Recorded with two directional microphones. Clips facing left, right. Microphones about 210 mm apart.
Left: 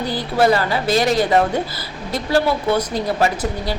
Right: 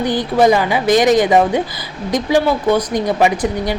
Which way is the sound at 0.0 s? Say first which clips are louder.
Right 4 dB; 15° right (ahead or behind).